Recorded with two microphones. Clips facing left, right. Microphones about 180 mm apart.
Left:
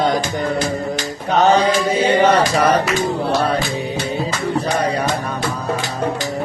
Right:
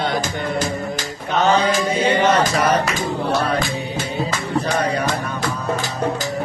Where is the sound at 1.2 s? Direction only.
35° left (ahead or behind).